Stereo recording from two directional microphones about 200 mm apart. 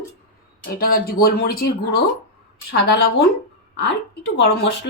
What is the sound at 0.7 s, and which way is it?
A woman's voice, 50° left (ahead or behind).